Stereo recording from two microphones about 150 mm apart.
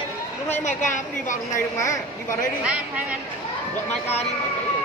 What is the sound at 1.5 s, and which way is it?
Speech, 20° left (ahead or behind).